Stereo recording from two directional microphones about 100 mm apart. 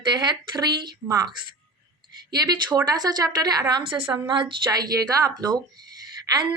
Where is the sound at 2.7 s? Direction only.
40° right (ahead or behind).